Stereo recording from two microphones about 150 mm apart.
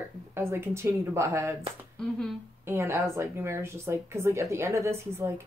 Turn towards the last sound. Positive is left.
turn(degrees=-20)  # may be behind; listen again after turning